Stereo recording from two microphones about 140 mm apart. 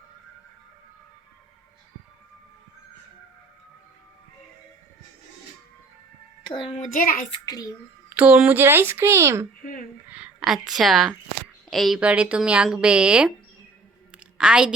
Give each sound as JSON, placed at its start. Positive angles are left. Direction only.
{"t": 6.4, "sound": "child singing", "side_deg": 35}
{"t": 6.7, "sound": "a child's voice", "side_deg": 65}
{"t": 7.4, "sound": "a child's voice", "side_deg": 25}
{"t": 8.1, "sound": "speech", "side_deg": -10}
{"t": 10.1, "sound": "a sound", "side_deg": -10}
{"t": 10.7, "sound": "speech", "side_deg": 0}
{"t": 14.3, "sound": "speech", "side_deg": -5}